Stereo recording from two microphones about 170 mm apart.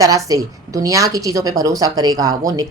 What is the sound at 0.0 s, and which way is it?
Speech, 20° right (ahead or behind).